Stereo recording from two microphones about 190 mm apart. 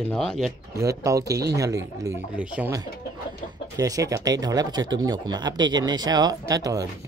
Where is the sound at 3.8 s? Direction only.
20° right (ahead or behind).